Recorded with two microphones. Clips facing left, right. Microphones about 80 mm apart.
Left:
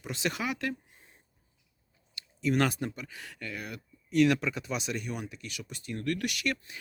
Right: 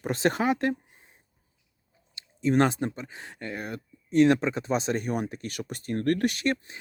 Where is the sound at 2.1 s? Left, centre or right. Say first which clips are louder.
Right 5 dB; right.